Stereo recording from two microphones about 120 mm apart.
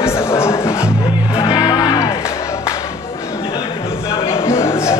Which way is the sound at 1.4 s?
30° left (ahead or behind).